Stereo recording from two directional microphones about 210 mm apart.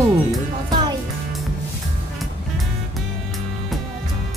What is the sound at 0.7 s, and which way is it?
Music, 20° right (ahead or behind).